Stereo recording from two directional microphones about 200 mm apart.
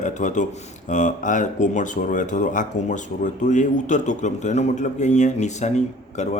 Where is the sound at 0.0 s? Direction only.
40° left (ahead or behind).